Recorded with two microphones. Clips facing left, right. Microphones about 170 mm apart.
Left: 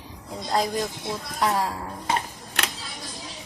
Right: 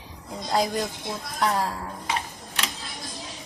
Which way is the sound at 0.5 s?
Centre (ahead or behind).